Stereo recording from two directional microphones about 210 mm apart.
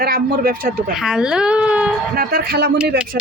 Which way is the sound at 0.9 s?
5° right (ahead or behind).